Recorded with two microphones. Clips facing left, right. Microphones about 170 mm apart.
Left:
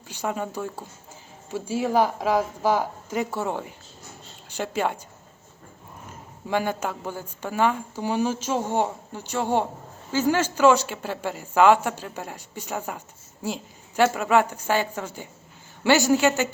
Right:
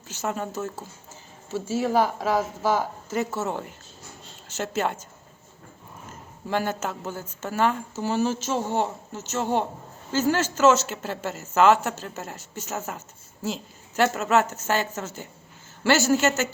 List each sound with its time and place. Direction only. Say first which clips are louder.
0.1 s a woman's voice: left 1 dB; 10° left (ahead or behind)
6.5 s speech: left 1 dB; 10° left (ahead or behind)